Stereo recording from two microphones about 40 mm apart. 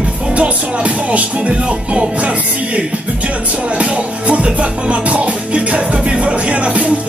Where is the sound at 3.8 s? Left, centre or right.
Right.